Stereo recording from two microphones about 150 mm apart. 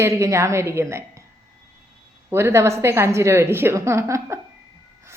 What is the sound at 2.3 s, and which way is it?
A woman's voice, 15° right (ahead or behind).